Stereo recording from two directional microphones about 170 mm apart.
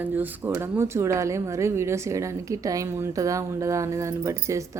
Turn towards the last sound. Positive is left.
turn(degrees=-20)  # may be behind; listen again after turning